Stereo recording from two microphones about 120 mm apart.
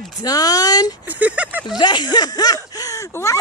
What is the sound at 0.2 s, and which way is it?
Speech, 30° left (ahead or behind).